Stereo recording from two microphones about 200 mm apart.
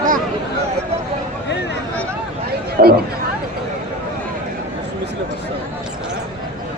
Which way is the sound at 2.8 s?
45° right (ahead or behind).